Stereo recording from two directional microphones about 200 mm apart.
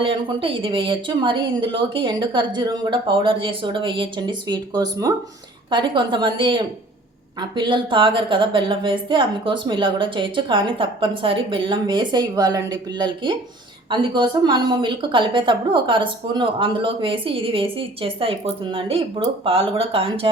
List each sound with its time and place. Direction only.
0.0 s a woman's voice: 25° right (ahead or behind)